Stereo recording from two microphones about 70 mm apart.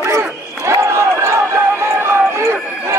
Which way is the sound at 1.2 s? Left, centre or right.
Right.